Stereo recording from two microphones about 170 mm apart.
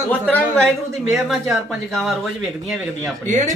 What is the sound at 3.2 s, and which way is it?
Speech, 45° right (ahead or behind).